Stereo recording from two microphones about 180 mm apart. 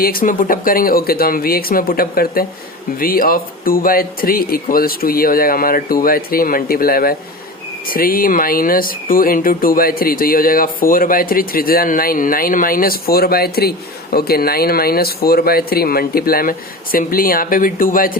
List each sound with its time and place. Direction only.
0.0 s speech: 55° left (ahead or behind)